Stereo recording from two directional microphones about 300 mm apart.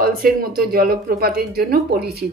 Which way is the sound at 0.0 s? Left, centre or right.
Right.